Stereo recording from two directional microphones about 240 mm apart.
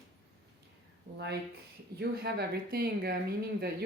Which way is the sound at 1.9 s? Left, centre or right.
Right.